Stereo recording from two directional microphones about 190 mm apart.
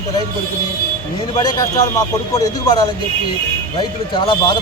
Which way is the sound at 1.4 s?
20° left (ahead or behind).